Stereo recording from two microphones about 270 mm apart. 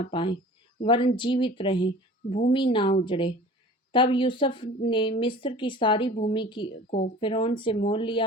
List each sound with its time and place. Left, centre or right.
0.0 s speech: centre